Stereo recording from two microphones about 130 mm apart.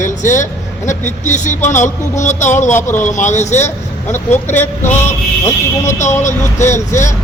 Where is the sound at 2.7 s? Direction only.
20° left (ahead or behind).